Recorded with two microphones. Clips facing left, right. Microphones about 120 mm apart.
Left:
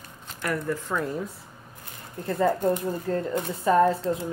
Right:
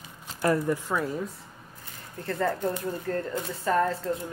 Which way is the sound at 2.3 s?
15° left (ahead or behind).